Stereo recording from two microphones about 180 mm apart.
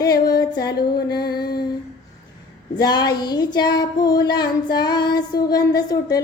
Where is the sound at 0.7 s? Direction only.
60° left (ahead or behind).